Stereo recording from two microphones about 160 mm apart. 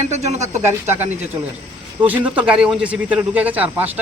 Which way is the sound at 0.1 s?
45° right (ahead or behind).